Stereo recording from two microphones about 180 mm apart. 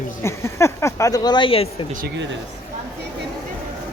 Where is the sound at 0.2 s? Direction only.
15° left (ahead or behind).